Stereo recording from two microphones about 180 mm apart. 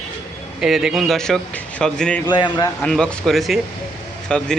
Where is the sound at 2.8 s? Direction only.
5° left (ahead or behind).